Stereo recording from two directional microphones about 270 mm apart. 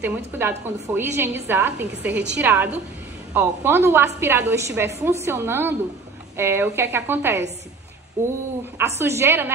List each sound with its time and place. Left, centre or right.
0.0 s a woman's voice: centre
8.7 s a woman's voice: centre